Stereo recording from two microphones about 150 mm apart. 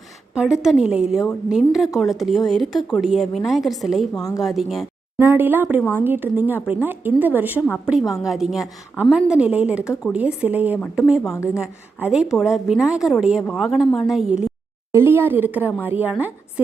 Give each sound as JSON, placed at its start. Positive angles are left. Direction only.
{"t": 0.3, "sound": "a woman's voice", "side_deg": -5}
{"t": 4.2, "sound": "speech", "side_deg": 25}
{"t": 4.4, "sound": "a woman's voice", "side_deg": 0}
{"t": 5.1, "sound": "a woman's voice", "side_deg": -15}
{"t": 11.2, "sound": "speech", "side_deg": 20}
{"t": 11.5, "sound": "a woman's voice", "side_deg": -5}
{"t": 14.9, "sound": "a woman's voice", "side_deg": -15}